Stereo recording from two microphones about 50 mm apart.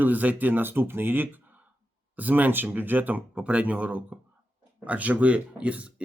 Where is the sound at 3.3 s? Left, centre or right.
Right.